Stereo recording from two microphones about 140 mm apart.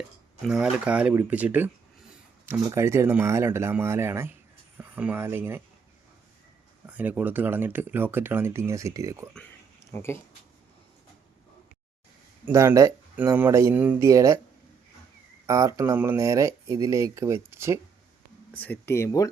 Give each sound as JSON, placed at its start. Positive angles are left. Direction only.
{"t": 0.4, "sound": "speech", "side_deg": -5}
{"t": 6.8, "sound": "speech", "side_deg": -10}
{"t": 9.9, "sound": "speech", "side_deg": 20}
{"t": 12.5, "sound": "speech", "side_deg": -20}
{"t": 14.1, "sound": "speech", "side_deg": -25}
{"t": 15.4, "sound": "speech", "side_deg": -25}
{"t": 18.5, "sound": "speech", "side_deg": 10}